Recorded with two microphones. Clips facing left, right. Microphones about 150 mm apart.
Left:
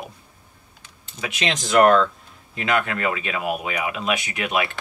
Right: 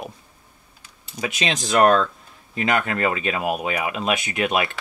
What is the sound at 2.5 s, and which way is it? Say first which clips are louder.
Speech: right 1 dB; 35° right (ahead or behind).